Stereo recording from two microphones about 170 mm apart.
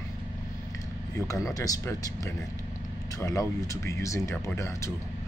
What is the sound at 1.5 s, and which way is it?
Speech, 20° left (ahead or behind).